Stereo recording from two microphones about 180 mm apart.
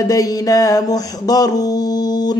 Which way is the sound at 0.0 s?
20° left (ahead or behind).